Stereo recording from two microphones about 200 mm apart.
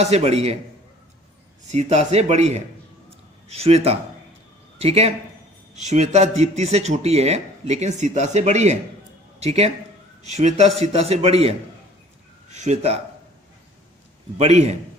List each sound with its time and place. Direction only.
0.0 s speech: 30° right (ahead or behind)
1.7 s speech: 35° right (ahead or behind)
14.3 s speech: 35° right (ahead or behind)